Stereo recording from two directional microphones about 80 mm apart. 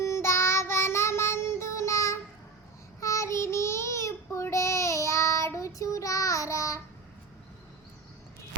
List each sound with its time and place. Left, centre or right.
0.0 s child singing: left